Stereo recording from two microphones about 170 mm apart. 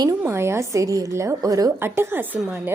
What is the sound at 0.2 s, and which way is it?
A woman's voice, 15° right (ahead or behind).